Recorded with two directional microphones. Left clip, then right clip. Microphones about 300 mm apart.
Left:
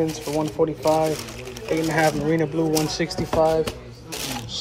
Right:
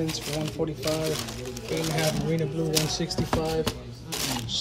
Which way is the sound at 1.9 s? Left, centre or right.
Centre.